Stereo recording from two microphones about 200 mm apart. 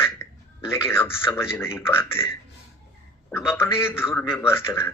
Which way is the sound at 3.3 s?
5° right (ahead or behind).